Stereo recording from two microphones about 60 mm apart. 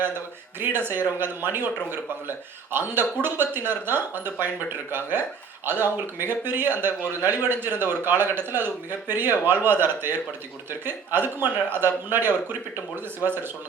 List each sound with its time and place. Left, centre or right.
0.6 s a man's voice: right
2.7 s a man's voice: right